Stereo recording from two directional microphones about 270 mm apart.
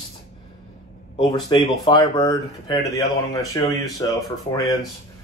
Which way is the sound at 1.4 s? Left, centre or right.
Centre.